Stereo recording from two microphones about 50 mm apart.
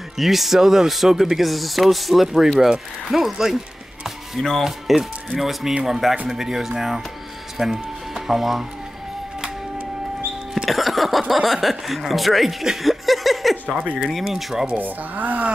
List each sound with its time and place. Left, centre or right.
0.2 s speech: centre
4.6 s speech: centre
10.5 s speech: centre
13.7 s speech: right
14.1 s speech: centre
14.8 s speech: right